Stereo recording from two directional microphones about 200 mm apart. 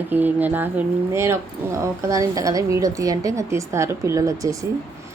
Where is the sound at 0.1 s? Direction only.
10° right (ahead or behind).